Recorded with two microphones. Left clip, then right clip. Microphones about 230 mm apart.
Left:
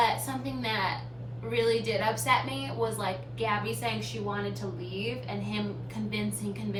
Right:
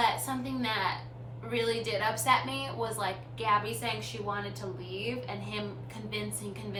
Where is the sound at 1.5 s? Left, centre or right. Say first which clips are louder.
Left 4 dB; centre.